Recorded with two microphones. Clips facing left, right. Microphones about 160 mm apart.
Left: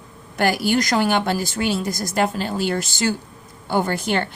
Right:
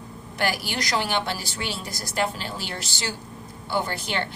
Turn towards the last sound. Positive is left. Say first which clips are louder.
# left 6 dB
turn(degrees=50)  # may be behind; listen again after turning